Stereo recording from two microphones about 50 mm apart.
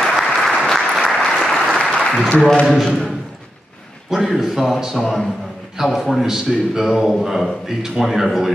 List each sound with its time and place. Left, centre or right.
0.2 s applause: centre
2.0 s applause: centre
2.7 s speech: centre
4.1 s speech: centre
4.9 s speech: centre
6.2 s a man's voice: centre